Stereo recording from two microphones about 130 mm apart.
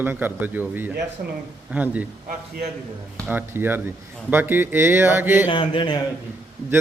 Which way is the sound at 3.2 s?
15° right (ahead or behind).